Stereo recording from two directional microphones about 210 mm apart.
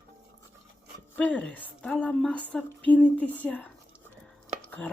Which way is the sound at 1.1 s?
5° left (ahead or behind).